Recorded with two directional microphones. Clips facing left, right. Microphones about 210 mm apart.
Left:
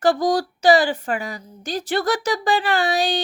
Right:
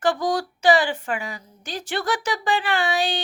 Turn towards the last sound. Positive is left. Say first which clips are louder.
# left 3 dB
turn(degrees=40)  # may be behind; listen again after turning